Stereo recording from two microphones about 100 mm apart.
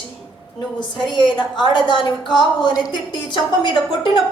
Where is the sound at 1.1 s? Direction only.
50° left (ahead or behind).